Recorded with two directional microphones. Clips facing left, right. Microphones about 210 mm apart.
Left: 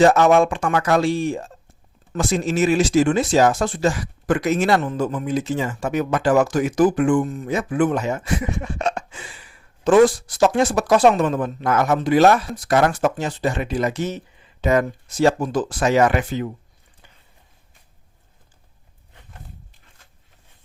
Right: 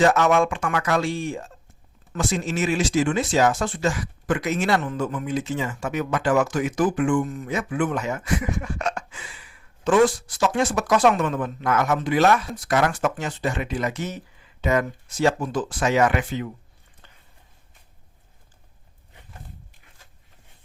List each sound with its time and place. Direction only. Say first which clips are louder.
0.0 s speech: left 4 dB; 35° left (ahead or behind)
9.8 s speech: left 4 dB; 40° left (ahead or behind)